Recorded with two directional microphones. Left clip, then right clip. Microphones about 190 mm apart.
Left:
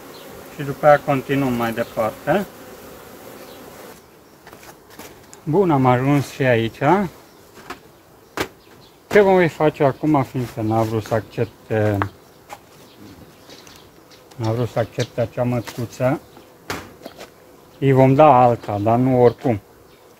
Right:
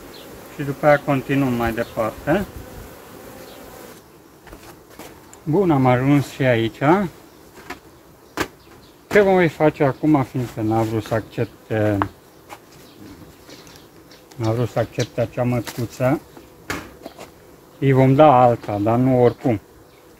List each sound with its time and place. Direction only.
0.6 s speech: centre (ahead or behind)
5.5 s speech: 35° left (ahead or behind)
9.1 s speech: 30° left (ahead or behind)
14.3 s speech: centre (ahead or behind)
17.7 s speech: 30° left (ahead or behind)